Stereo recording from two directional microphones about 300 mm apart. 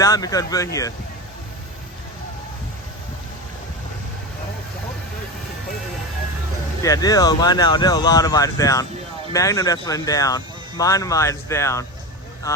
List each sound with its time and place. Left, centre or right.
0.0 s speech: centre
6.8 s speech: centre